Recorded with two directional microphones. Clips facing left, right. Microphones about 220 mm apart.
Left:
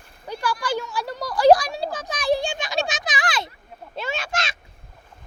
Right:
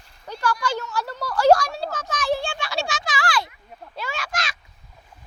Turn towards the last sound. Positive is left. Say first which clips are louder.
# left 3 dB
turn(degrees=25)  # may be behind; listen again after turning